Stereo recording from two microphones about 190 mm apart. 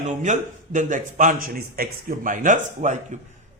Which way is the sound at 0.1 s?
40° right (ahead or behind).